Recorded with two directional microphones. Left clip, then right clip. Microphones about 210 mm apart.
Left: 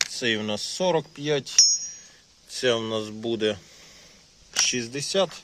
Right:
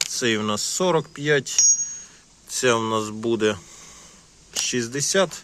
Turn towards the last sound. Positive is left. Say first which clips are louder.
# right 3 dB
turn(degrees=0)  # may be behind; listen again after turning